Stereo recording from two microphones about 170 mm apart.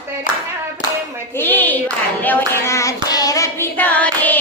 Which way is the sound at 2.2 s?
10° left (ahead or behind).